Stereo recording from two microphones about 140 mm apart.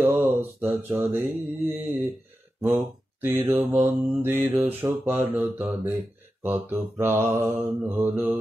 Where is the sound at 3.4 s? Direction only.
15° right (ahead or behind).